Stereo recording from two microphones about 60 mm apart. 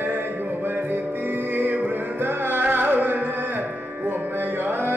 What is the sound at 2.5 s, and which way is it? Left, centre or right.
Music, right.